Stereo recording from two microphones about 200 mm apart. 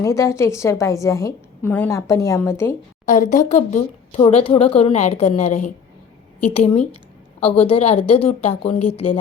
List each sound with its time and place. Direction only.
0.0 s a woman's voice: 15° left (ahead or behind)
3.1 s speech: 40° left (ahead or behind)